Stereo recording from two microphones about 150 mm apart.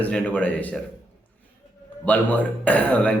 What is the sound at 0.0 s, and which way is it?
Speech, 10° left (ahead or behind).